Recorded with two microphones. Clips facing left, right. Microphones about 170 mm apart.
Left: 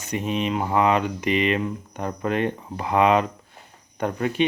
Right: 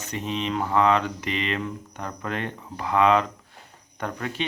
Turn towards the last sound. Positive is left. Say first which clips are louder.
# left 7 dB
turn(degrees=20)  # may be behind; listen again after turning